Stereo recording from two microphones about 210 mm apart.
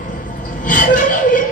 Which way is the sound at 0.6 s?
40° left (ahead or behind).